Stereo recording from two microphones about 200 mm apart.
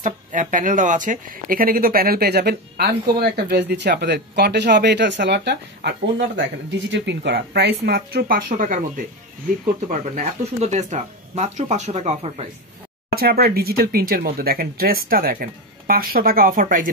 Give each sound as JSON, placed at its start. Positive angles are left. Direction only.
{"t": 0.0, "sound": "speech", "side_deg": -40}
{"t": 13.1, "sound": "speech", "side_deg": -50}